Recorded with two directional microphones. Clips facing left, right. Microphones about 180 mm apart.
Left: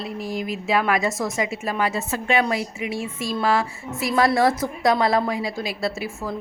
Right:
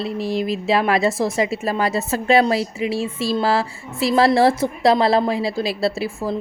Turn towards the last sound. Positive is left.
turn(degrees=-30)  # may be behind; listen again after turning